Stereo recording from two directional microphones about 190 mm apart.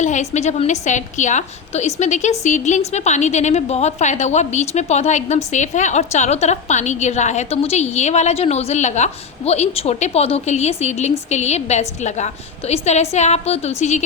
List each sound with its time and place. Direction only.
0.0 s a woman's voice: 40° left (ahead or behind)